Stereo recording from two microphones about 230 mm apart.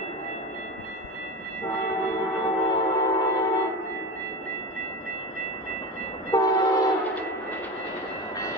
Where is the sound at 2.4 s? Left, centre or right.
Centre.